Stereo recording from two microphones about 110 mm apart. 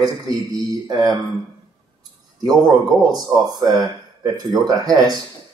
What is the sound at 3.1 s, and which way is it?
Speech, 35° right (ahead or behind).